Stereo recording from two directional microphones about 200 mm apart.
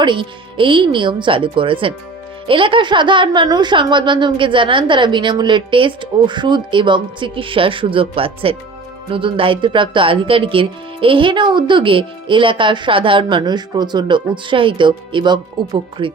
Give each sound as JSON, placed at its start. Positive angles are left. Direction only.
{"t": 0.0, "sound": "speech", "side_deg": -25}